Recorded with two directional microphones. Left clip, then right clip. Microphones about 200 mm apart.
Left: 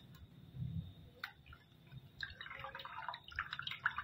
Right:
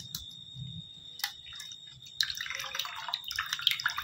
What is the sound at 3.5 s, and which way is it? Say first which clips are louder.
Drip: right 12 dB; 15° right (ahead or behind).